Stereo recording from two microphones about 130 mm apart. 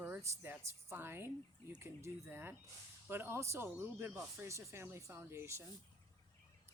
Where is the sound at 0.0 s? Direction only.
15° right (ahead or behind).